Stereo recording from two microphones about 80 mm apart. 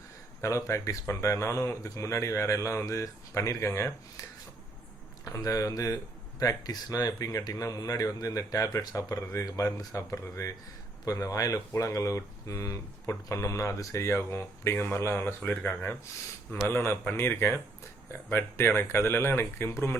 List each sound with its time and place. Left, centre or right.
0.4 s speech: left
4.2 s a sound: left
5.2 s speech: left
15.4 s speech: centre